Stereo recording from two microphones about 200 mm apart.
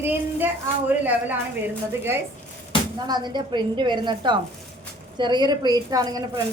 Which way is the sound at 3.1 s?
20° right (ahead or behind).